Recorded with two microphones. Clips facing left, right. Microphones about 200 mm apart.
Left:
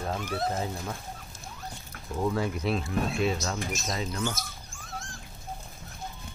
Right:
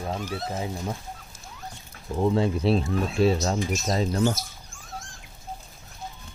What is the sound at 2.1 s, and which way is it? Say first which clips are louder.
Speech: right 5 dB; 25° right (ahead or behind).